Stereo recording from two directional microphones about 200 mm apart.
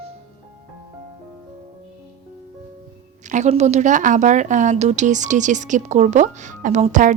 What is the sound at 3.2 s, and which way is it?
A woman's voice, 35° right (ahead or behind).